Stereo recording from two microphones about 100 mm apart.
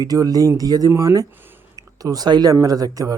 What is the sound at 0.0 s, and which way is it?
Speech, 40° right (ahead or behind).